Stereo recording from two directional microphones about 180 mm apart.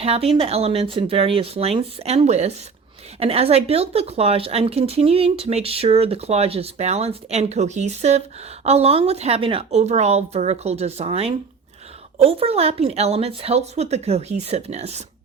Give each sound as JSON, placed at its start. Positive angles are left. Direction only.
{"t": 0.0, "sound": "speech", "side_deg": -35}